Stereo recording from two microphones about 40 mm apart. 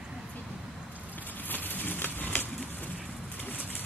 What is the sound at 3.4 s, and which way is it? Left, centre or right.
Bird, left.